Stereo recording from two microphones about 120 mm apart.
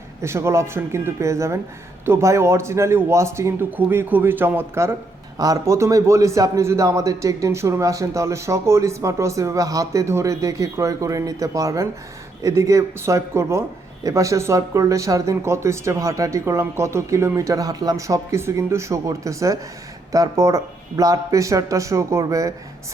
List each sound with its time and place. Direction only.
0.2 s a man's voice: 25° right (ahead or behind)